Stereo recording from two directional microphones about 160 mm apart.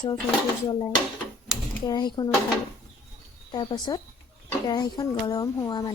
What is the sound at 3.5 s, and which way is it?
Speech, 25° left (ahead or behind).